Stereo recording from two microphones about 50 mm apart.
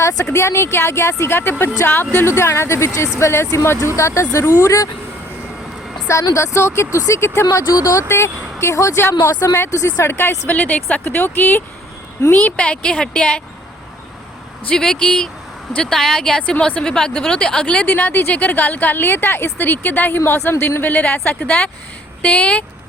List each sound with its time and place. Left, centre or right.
0.3 s speech: left
2.1 s speech: left
6.1 s speech: left
9.0 s speech: left
10.1 s speech: left
10.5 s speech: left
11.0 s speech: left
12.4 s speech: left
14.8 s speech: centre
17.8 s speech: left
20.2 s speech: left
20.9 s speech: left